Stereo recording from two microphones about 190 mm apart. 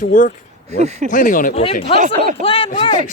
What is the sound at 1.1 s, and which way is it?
Speech, 45° left (ahead or behind).